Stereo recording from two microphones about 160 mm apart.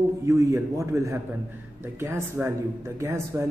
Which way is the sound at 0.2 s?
20° right (ahead or behind).